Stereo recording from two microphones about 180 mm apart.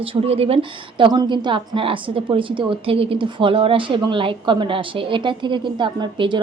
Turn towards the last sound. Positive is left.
turn(degrees=-25)  # may be behind; listen again after turning